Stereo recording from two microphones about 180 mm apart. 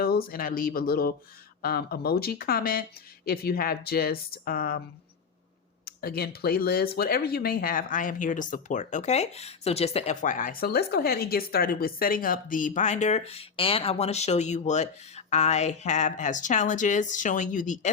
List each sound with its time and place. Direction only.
0.0 s speech: 55° left (ahead or behind)
5.8 s speech: 60° left (ahead or behind)